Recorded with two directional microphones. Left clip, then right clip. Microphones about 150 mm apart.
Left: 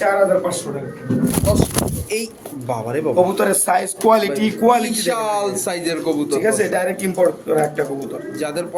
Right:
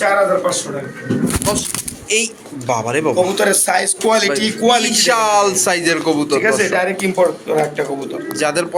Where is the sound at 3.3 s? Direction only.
90° left; by 4.8 s 70° left (ahead or behind).